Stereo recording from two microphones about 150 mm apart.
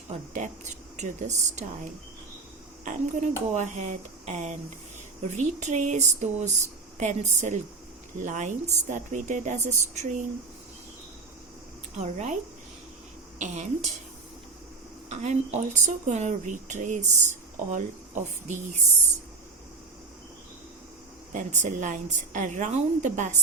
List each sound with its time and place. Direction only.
0.1 s a woman's voice: 55° right (ahead or behind)
2.8 s a woman's voice: 55° right (ahead or behind)
11.9 s a woman's voice: 50° right (ahead or behind)
13.4 s a woman's voice: 55° right (ahead or behind)
15.1 s a woman's voice: 50° right (ahead or behind)
21.3 s a woman's voice: 50° right (ahead or behind)